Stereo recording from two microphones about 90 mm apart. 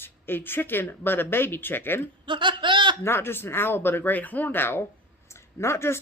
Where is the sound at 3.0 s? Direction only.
25° left (ahead or behind).